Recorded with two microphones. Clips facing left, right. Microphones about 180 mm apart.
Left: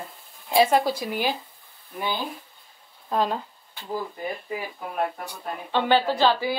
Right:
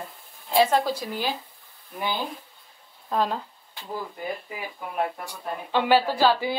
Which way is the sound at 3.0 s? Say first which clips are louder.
Left 1 dB; centre (ahead or behind).